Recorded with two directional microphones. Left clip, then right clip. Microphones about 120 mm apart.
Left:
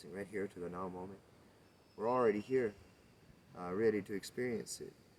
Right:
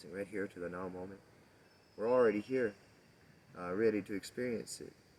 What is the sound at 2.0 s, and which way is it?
Speech, 25° left (ahead or behind).